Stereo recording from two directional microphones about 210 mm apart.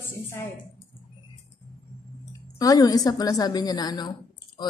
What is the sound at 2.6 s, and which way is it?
A woman's voice, 20° left (ahead or behind).